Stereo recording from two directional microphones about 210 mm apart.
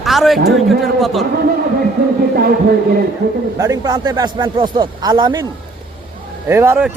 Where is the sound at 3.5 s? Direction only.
15° right (ahead or behind).